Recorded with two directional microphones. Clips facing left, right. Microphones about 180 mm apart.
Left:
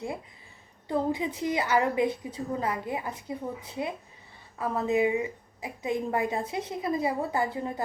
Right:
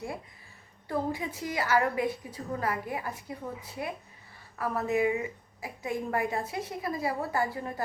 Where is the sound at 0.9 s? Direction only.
20° left (ahead or behind).